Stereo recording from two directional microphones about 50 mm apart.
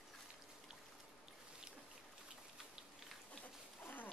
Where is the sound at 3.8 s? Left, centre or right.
Left.